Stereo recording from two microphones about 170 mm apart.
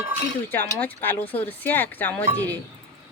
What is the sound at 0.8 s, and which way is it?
Speech, 10° left (ahead or behind).